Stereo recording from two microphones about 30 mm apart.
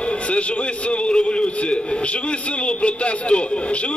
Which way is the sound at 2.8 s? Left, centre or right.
Left.